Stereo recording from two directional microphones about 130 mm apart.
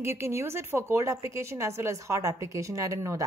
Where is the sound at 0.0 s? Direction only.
20° right (ahead or behind).